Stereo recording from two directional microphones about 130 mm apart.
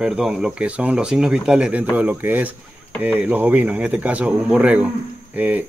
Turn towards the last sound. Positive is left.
turn(degrees=-10)  # may be behind; listen again after turning